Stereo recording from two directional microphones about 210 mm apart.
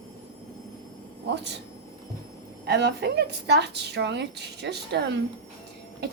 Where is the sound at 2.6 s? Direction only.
55° right (ahead or behind).